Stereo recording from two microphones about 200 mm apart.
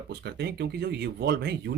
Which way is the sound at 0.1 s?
55° right (ahead or behind).